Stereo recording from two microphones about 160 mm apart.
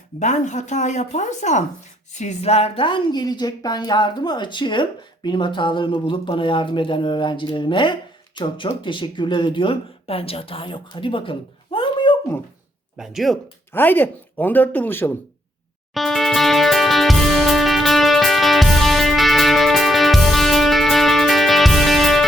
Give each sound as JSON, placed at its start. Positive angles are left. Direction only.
{"t": 0.2, "sound": "speech", "side_deg": 45}
{"t": 13.0, "sound": "speech", "side_deg": 0}
{"t": 13.7, "sound": "speech", "side_deg": 10}
{"t": 16.0, "sound": "music", "side_deg": 0}